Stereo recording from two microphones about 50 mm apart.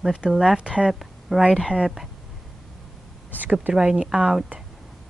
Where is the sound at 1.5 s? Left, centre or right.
Centre.